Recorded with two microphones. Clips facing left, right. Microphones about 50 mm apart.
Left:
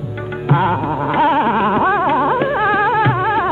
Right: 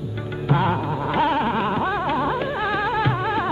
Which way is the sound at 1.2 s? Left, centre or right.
Left.